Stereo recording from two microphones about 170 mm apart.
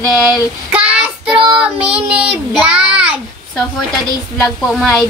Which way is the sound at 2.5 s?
5° right (ahead or behind).